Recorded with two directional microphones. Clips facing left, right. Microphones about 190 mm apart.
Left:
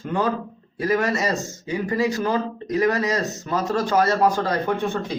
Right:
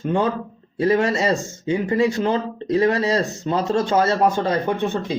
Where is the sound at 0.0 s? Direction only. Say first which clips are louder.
Right 3 dB; 25° right (ahead or behind).